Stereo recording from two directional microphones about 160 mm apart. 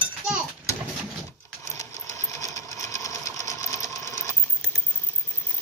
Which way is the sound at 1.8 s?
20° left (ahead or behind).